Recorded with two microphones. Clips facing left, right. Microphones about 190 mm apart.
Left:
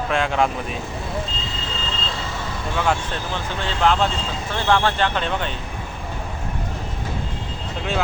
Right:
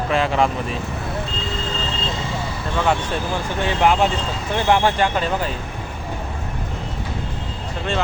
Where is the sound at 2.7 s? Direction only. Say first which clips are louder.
Right 2 dB; 5° right (ahead or behind).